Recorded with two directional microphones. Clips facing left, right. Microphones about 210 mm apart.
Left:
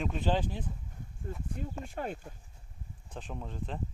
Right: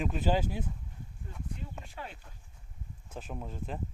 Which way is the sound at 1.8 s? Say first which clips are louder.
Left 8 dB; 50° left (ahead or behind).